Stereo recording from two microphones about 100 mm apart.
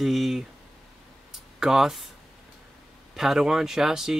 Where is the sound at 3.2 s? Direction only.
5° right (ahead or behind).